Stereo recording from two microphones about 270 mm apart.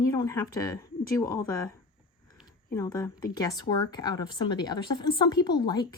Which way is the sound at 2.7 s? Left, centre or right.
Centre.